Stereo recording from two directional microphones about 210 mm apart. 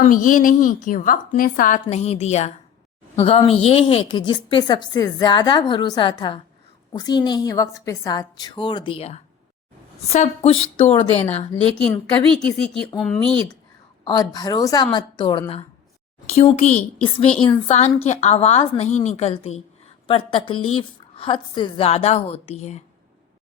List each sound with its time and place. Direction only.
0.1 s a woman's voice: 40° left (ahead or behind)
13.0 s speech: 5° left (ahead or behind)
14.0 s a woman's voice: 20° left (ahead or behind)